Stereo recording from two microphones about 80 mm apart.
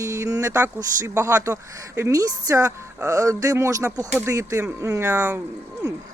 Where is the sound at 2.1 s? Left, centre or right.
Right.